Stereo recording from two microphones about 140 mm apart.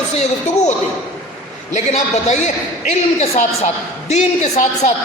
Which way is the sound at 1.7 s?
55° left (ahead or behind).